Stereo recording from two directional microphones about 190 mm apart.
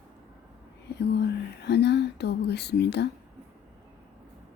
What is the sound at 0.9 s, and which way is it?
Speech, 60° left (ahead or behind).